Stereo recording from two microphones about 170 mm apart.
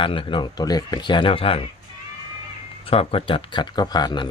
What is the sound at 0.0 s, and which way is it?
Speech, 30° left (ahead or behind).